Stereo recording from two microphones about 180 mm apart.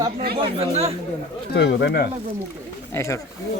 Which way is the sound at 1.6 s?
70° left (ahead or behind).